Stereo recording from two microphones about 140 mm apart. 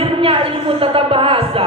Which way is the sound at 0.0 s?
40° right (ahead or behind).